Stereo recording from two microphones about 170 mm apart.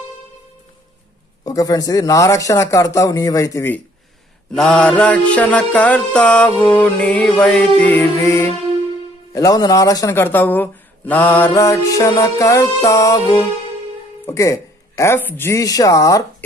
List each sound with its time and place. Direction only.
1.4 s a man's voice: 20° left (ahead or behind)
4.5 s speech: 5° left (ahead or behind); by 16.4 s 20° left (ahead or behind)